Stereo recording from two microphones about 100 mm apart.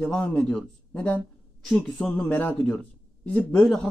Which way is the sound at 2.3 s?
20° left (ahead or behind).